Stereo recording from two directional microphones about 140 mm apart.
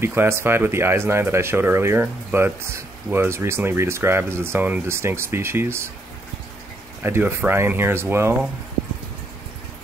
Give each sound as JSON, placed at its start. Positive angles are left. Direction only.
{"t": 0.0, "sound": "speech", "side_deg": -15}
{"t": 7.0, "sound": "speech", "side_deg": -15}